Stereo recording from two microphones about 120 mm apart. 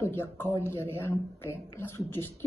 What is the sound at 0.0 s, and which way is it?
A woman's voice, 20° left (ahead or behind).